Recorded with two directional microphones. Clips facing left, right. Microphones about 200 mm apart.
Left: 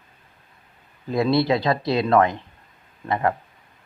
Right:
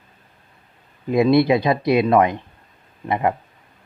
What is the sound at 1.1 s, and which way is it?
Speech, 20° right (ahead or behind).